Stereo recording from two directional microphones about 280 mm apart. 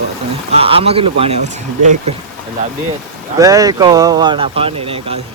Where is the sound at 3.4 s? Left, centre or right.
Centre.